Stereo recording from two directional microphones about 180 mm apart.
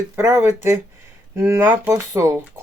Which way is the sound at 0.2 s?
15° right (ahead or behind).